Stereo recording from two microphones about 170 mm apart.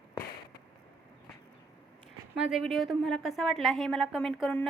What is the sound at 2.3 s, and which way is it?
A woman's voice, 5° right (ahead or behind).